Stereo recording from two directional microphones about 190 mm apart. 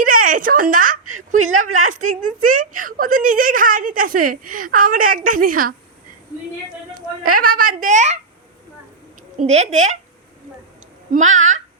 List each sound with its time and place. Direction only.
0.0 s a sound: 45° right (ahead or behind)
1.5 s speech: 40° right (ahead or behind)
6.9 s speech: 50° right (ahead or behind)
9.5 s speech: 35° right (ahead or behind)
11.1 s speech: 40° right (ahead or behind)